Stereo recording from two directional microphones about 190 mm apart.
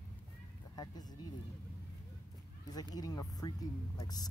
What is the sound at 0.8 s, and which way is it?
Speech, 20° left (ahead or behind).